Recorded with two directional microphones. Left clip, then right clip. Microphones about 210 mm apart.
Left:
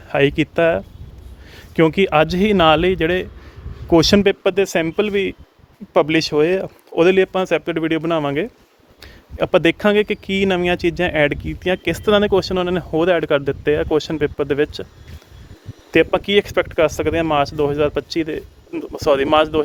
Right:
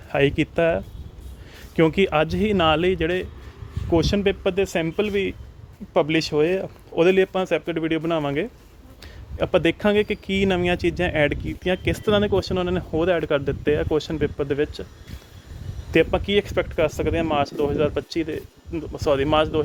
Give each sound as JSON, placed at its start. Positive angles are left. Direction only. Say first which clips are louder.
{"t": 0.1, "sound": "speech", "louder": "left 4 dB", "side_deg": 15}
{"t": 3.8, "sound": "speech", "louder": "left 7 dB", "side_deg": 25}
{"t": 15.9, "sound": "speech", "louder": "left 4 dB", "side_deg": 20}